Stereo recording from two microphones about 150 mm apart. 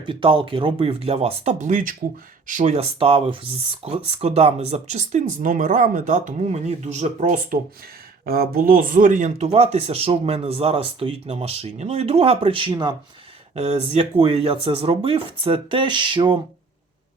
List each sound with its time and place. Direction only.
0.0 s speech: 35° right (ahead or behind); by 2.8 s 55° right (ahead or behind)
3.0 s speech: 35° right (ahead or behind); by 7.6 s 55° right (ahead or behind)
8.2 s speech: 80° right; by 13.0 s 30° right (ahead or behind)
13.6 s speech: 45° right (ahead or behind)